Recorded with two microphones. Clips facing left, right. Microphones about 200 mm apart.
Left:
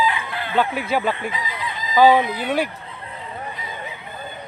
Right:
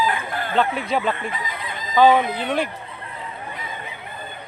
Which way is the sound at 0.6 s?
5° left (ahead or behind).